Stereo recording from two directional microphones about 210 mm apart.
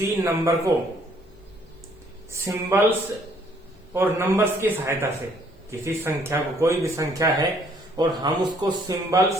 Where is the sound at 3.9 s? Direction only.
10° right (ahead or behind).